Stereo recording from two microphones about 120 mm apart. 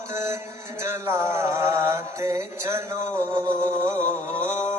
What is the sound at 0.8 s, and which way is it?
Music, 20° right (ahead or behind).